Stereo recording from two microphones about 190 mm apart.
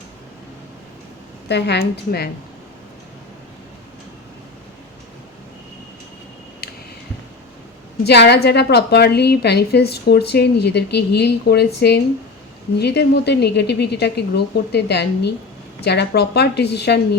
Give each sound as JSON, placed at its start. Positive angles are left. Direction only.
{"t": 1.5, "sound": "a woman's voice", "side_deg": 60}
{"t": 6.6, "sound": "a sound", "side_deg": 50}
{"t": 8.0, "sound": "a woman's voice", "side_deg": 60}